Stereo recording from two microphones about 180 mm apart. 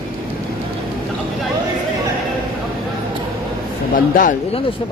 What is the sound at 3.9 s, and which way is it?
Speech, 50° left (ahead or behind).